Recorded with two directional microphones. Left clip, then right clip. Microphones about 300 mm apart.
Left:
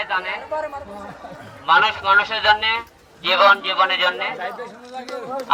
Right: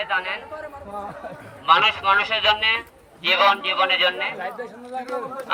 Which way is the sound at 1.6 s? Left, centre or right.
Centre.